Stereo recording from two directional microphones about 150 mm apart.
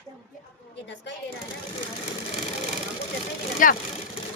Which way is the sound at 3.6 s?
65° left (ahead or behind).